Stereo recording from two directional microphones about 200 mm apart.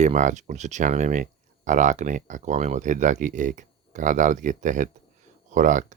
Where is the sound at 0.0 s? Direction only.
40° right (ahead or behind).